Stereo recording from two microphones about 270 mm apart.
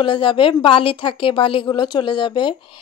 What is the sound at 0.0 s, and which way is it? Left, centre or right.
A woman's voice, centre.